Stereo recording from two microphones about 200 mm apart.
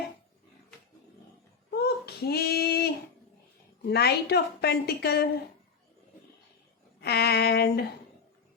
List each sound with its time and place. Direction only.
1.7 s child singing: 50° left (ahead or behind)
3.8 s a woman's voice: 55° left (ahead or behind)
7.0 s a woman's voice: 55° left (ahead or behind)